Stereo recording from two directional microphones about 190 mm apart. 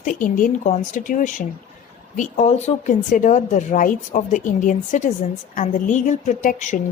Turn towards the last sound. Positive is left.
turn(degrees=40)  # may be behind; listen again after turning